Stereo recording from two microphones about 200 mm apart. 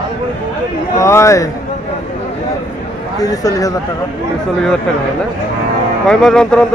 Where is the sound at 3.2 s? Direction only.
15° left (ahead or behind).